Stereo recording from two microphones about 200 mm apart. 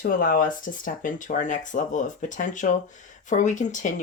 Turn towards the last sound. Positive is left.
turn(degrees=40)  # may be behind; listen again after turning